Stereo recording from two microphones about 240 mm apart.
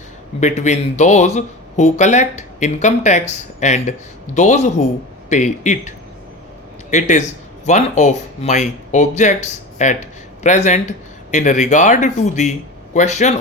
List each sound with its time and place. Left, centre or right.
0.3 s speech: left
6.9 s speech: left